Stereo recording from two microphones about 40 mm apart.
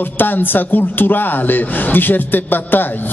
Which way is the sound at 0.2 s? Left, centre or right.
Left.